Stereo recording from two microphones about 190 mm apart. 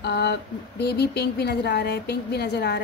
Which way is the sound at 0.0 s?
60° left (ahead or behind).